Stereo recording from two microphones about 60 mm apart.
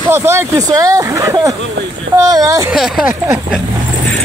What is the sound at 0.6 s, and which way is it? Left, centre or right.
Speech, right.